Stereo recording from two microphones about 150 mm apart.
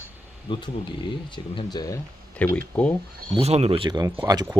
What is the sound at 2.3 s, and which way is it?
Speech, 10° left (ahead or behind).